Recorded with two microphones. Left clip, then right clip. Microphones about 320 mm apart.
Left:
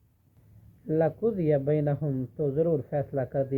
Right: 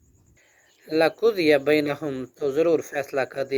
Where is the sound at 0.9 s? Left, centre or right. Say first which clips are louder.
Right 6 dB; right.